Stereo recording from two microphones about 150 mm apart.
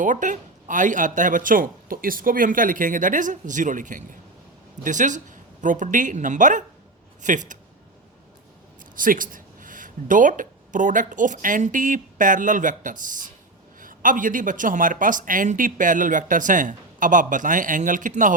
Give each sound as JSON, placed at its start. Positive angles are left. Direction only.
{"t": 0.0, "sound": "speech", "side_deg": -60}
{"t": 9.0, "sound": "speech", "side_deg": -65}